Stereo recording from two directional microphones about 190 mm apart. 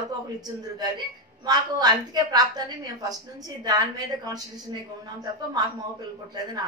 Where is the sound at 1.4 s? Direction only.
20° right (ahead or behind).